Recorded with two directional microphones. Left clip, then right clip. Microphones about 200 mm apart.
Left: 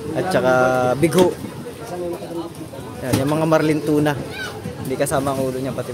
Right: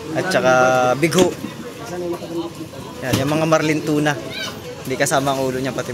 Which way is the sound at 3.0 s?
15° left (ahead or behind).